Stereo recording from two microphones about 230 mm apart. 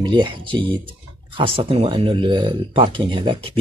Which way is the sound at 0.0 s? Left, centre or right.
Right.